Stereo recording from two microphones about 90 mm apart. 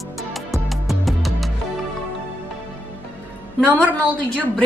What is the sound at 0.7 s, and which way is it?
Music, centre (ahead or behind).